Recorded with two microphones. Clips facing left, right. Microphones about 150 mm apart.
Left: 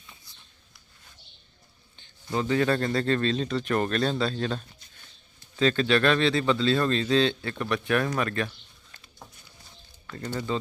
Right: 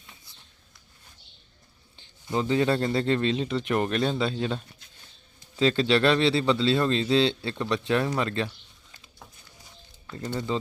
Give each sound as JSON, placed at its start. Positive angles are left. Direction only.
{"t": 2.0, "sound": "a man's voice", "side_deg": -20}
{"t": 10.3, "sound": "a man's voice", "side_deg": -20}